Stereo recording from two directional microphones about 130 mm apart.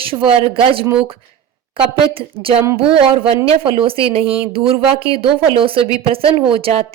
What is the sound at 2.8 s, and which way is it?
A woman's voice, 45° right (ahead or behind).